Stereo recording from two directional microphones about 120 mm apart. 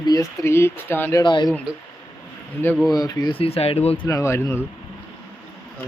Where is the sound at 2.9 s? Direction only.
30° left (ahead or behind).